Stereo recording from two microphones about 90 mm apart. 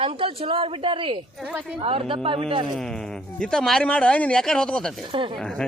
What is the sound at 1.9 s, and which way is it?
Speech, 90° right.